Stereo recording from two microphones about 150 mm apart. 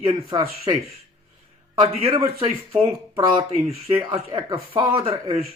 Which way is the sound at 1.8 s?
40° right (ahead or behind).